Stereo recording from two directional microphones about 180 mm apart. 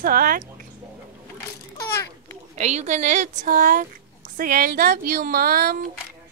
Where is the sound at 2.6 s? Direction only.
40° right (ahead or behind); by 5.7 s 55° right (ahead or behind).